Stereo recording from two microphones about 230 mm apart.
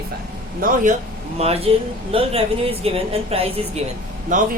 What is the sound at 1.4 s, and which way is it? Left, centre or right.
A woman's voice, right.